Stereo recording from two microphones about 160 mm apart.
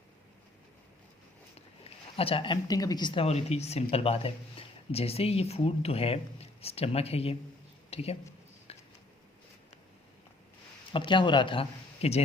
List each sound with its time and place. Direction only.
1.5 s speech: 40° left (ahead or behind)
7.9 s a sound: 40° left (ahead or behind)
10.9 s speech: 30° left (ahead or behind)